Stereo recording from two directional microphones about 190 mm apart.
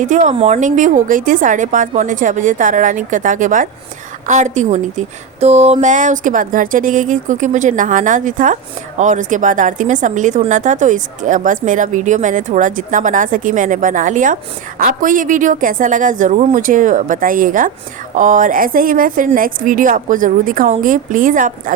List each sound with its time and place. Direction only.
0.0 s a woman's voice: 40° right (ahead or behind)